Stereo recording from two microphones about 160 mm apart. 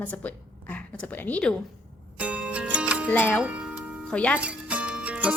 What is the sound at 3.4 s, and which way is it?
Music, 5° right (ahead or behind).